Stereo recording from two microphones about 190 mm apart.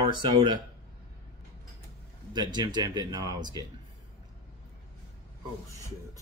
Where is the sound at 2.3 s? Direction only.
25° right (ahead or behind).